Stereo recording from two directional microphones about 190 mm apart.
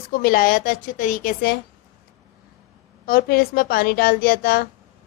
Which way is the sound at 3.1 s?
55° left (ahead or behind).